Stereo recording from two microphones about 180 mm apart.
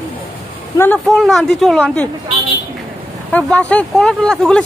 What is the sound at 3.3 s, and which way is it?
Speech, 5° left (ahead or behind).